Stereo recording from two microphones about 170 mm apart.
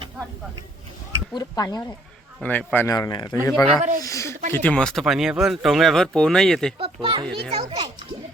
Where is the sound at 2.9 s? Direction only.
25° left (ahead or behind).